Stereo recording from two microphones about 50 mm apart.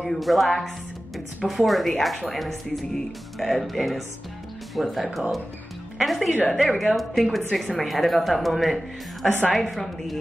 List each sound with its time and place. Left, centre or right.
0.0 s a woman's voice: centre